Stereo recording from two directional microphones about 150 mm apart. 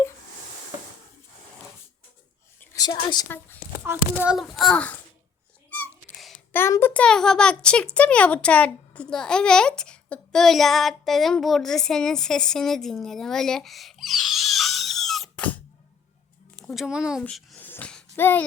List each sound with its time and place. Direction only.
2.7 s a woman's voice: 30° left (ahead or behind)
3.2 s speech: 15° left (ahead or behind)
3.8 s a child's voice: 10° right (ahead or behind); by 4.9 s 5° left (ahead or behind)
6.1 s a sound: centre (ahead or behind)
6.5 s a child's voice: 15° left (ahead or behind)
17.7 s a sound: 10° left (ahead or behind)